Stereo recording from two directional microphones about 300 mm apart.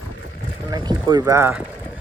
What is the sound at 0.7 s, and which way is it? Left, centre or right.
Speech, centre.